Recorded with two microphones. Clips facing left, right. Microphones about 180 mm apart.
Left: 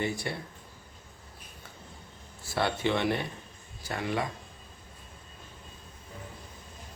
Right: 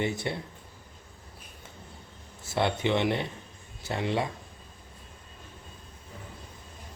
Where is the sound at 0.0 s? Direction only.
20° right (ahead or behind).